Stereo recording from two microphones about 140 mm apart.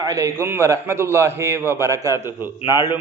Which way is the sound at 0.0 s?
20° right (ahead or behind).